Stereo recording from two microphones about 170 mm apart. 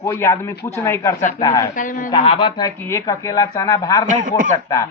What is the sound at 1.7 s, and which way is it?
Speech, 50° left (ahead or behind).